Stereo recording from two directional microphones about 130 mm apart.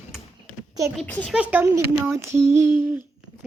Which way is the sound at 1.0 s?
10° left (ahead or behind).